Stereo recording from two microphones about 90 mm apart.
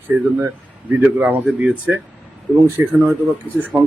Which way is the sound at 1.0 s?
20° right (ahead or behind).